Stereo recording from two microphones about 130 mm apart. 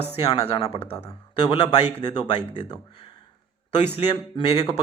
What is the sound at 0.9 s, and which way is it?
Speech, 35° left (ahead or behind).